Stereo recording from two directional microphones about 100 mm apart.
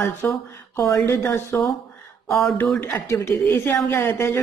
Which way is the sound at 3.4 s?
20° left (ahead or behind).